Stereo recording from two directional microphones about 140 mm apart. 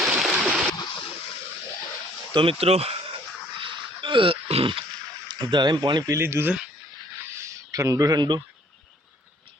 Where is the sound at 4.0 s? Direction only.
35° right (ahead or behind); by 6.5 s 15° right (ahead or behind).